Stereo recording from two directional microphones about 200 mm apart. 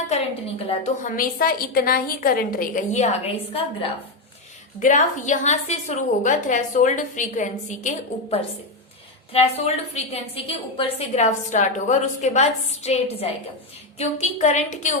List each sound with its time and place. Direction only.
0.1 s a woman's voice: 35° left (ahead or behind)